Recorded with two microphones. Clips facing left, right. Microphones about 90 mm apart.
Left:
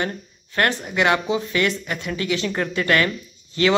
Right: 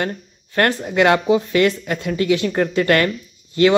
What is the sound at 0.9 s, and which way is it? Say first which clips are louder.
Speech: right 5 dB; 45° right (ahead or behind).